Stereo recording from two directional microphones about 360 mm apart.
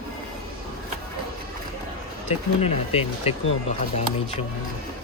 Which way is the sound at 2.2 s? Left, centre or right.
Centre.